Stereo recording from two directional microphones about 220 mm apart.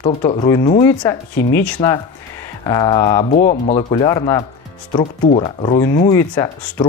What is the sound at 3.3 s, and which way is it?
Speech, 35° left (ahead or behind).